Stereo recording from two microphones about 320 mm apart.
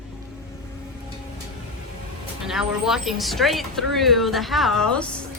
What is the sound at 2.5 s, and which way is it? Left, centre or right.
Speech, centre.